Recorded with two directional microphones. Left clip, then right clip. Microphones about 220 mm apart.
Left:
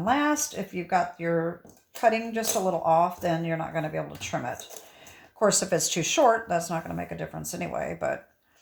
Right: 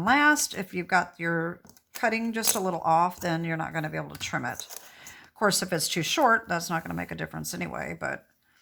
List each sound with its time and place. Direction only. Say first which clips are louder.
0.0 s speech: right 3 dB; 20° right (ahead or behind)